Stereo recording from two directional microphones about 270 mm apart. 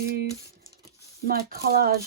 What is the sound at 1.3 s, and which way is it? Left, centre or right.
Speech, right.